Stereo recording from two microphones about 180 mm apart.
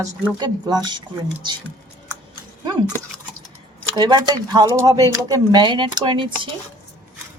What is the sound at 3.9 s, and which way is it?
Speech, 25° right (ahead or behind).